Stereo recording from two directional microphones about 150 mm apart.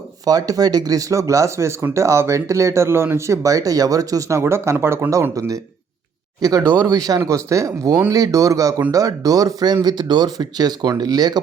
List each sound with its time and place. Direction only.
0.3 s speech: 25° right (ahead or behind)